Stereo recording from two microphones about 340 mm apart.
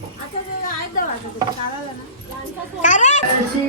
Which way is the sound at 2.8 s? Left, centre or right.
Left.